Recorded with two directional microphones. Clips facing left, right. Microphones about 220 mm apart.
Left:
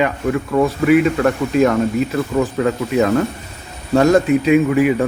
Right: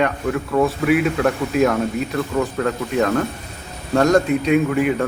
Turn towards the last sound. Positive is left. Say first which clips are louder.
# left 4 dB
turn(degrees=5)  # may be behind; listen again after turning